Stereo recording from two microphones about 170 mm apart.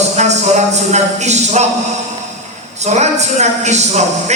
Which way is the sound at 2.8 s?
40° right (ahead or behind).